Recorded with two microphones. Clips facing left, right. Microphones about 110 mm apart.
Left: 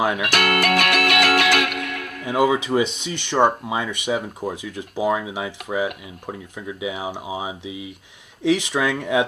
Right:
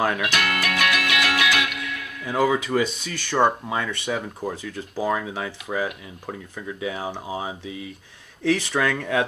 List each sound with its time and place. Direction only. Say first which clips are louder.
0.2 s music: left 4 dB; 55° left (ahead or behind)
2.2 s speech: left 2 dB; 15° left (ahead or behind)